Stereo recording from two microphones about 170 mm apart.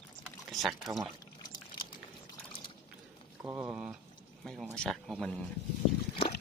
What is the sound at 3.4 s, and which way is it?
Speech, 10° right (ahead or behind).